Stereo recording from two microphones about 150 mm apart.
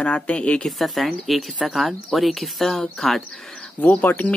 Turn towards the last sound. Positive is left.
turn(degrees=10)  # may be behind; listen again after turning